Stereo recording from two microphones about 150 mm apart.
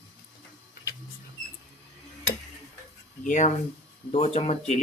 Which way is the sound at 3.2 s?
55° left (ahead or behind).